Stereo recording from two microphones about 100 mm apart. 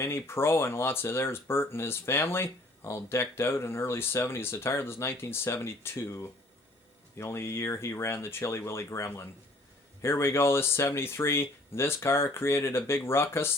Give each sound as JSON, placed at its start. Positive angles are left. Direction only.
{"t": 0.0, "sound": "speech", "side_deg": 25}